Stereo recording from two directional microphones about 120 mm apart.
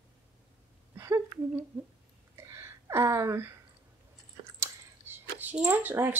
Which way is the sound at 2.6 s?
25° right (ahead or behind).